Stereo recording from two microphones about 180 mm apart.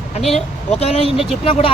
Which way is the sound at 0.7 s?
35° left (ahead or behind).